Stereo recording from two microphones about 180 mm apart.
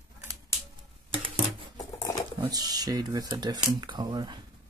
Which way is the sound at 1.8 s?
20° left (ahead or behind).